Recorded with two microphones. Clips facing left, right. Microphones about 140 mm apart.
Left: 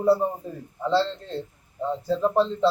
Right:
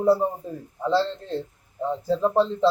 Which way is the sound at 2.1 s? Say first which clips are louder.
Right 1 dB; 10° right (ahead or behind).